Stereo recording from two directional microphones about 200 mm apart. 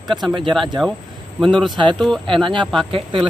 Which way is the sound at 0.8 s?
Centre (ahead or behind).